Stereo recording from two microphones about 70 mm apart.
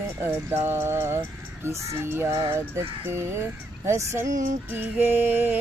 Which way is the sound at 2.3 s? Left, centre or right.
Right.